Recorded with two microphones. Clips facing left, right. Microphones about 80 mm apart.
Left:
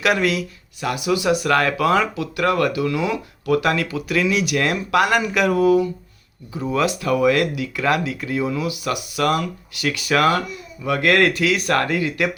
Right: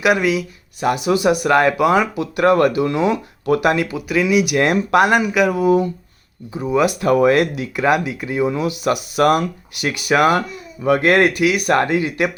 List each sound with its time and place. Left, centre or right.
0.0 s speech: centre
0.8 s speech: right
2.2 s speech: right; by 4.5 s centre
4.5 s speech: right
5.2 s speech: centre
5.6 s speech: right
6.5 s speech: centre
7.0 s speech: right
8.6 s speech: right